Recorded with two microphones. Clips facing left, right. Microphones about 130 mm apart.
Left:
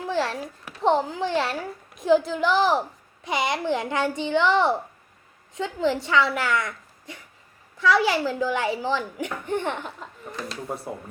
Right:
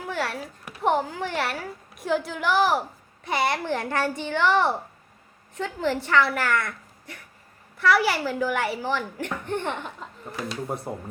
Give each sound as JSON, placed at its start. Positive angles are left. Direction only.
{"t": 0.1, "sound": "a child's voice", "side_deg": 20}
{"t": 9.8, "sound": "speech", "side_deg": 0}